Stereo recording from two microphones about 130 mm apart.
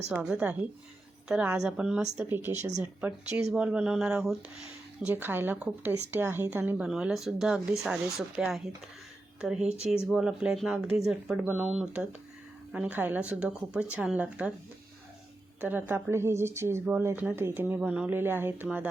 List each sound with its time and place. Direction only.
0.1 s speech: 5° right (ahead or behind)
6.8 s speech: 5° right (ahead or behind)
9.6 s speech: 55° right (ahead or behind)
10.1 s speech: 5° right (ahead or behind)
15.6 s speech: 15° right (ahead or behind)